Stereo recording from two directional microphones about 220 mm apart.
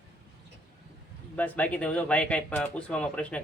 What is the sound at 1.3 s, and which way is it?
Speech, 5° left (ahead or behind).